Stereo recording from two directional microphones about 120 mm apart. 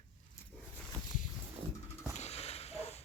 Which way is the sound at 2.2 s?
60° left (ahead or behind).